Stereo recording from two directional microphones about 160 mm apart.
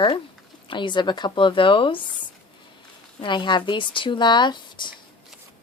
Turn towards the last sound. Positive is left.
turn(degrees=30)  # may be behind; listen again after turning